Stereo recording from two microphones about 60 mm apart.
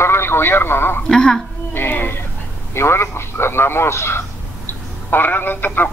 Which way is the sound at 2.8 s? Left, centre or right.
Left.